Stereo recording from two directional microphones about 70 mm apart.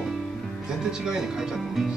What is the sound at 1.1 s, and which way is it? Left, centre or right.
Speech, centre.